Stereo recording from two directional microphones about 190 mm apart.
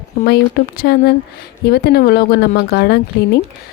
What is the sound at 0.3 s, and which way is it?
A woman's voice, 55° left (ahead or behind).